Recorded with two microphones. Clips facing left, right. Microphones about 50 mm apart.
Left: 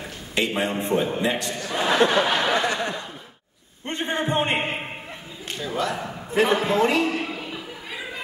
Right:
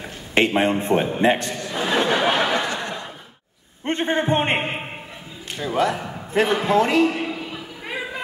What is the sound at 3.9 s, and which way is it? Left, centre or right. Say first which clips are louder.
Speech: right 4 dB; right.